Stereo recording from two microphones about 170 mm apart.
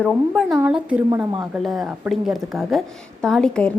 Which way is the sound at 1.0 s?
20° right (ahead or behind).